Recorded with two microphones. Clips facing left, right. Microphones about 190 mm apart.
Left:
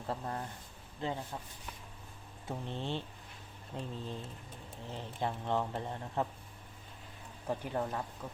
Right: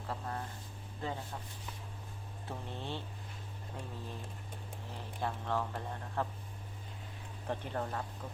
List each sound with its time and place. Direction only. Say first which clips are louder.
0.1 s speech: left 2 dB; 25° left (ahead or behind)
2.5 s speech: left 4 dB; 20° left (ahead or behind)
7.4 s speech: left 2 dB; 10° left (ahead or behind)